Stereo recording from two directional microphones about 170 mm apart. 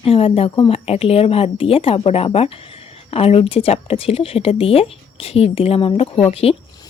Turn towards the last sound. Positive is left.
turn(degrees=35)  # may be behind; listen again after turning